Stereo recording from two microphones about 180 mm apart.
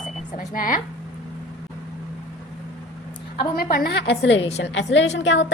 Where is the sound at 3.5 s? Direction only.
55° left (ahead or behind); by 4.4 s 70° left (ahead or behind).